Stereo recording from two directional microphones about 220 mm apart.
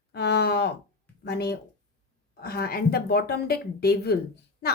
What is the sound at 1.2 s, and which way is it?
Speech, 50° left (ahead or behind).